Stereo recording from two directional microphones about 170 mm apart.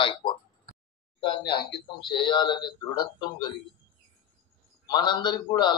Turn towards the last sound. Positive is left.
turn(degrees=25)  # may be behind; listen again after turning